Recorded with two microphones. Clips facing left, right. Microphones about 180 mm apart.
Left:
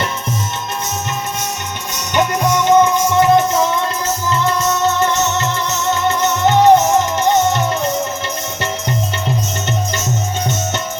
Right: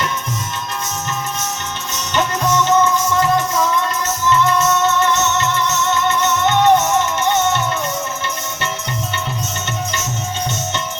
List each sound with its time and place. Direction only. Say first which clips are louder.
2.1 s music: left 2 dB; 15° left (ahead or behind); by 7.6 s 35° left (ahead or behind)